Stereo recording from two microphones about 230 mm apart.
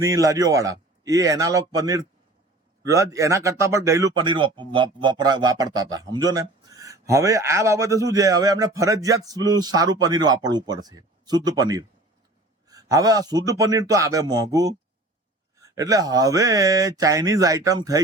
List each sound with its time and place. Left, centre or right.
0.0 s a man's voice: centre